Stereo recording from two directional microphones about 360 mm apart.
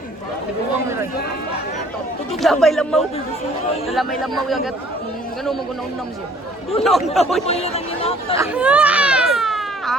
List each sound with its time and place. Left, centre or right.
2.4 s speech: centre
6.8 s speech: centre
7.4 s speech: centre
8.4 s baby cry: centre